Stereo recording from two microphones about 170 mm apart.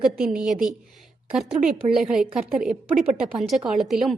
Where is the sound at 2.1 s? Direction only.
5° right (ahead or behind).